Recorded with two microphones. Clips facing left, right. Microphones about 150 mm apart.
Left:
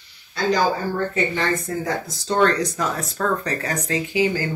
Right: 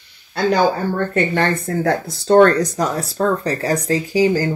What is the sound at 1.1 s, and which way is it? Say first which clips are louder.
Speech: right 4 dB; 60° right (ahead or behind).